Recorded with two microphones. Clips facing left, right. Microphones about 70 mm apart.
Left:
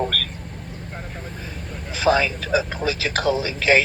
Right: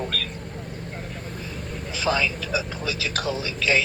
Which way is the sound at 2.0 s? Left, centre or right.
Left.